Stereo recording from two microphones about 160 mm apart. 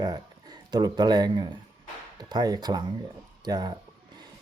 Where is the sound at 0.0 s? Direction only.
25° right (ahead or behind).